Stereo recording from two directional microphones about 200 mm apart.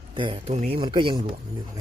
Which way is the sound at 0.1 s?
25° right (ahead or behind).